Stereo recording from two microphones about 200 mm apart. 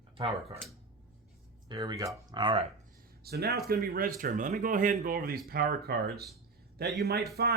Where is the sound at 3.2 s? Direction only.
50° right (ahead or behind).